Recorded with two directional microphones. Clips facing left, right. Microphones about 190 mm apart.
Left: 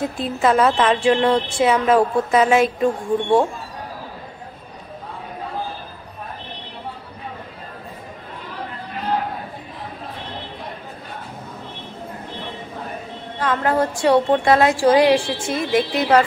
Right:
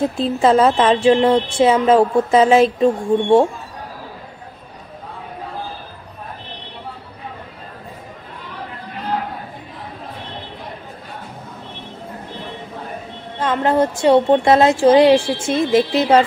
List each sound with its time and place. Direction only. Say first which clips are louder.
0.0 s a woman's voice: right 4 dB; 25° right (ahead or behind)
13.4 s a woman's voice: right 3 dB; 25° right (ahead or behind)